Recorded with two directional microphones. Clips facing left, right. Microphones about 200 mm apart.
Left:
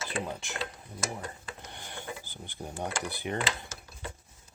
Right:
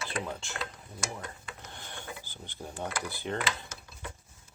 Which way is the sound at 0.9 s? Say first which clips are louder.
Left 2 dB; 35° left (ahead or behind).